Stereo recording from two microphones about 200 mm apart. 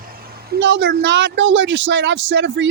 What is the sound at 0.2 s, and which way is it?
A woman's voice, 50° right (ahead or behind).